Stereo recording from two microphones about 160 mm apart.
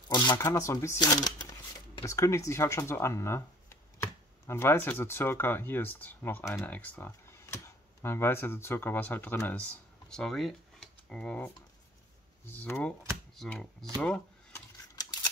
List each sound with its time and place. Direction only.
0.1 s speech: 25° left (ahead or behind); by 14.2 s 5° left (ahead or behind)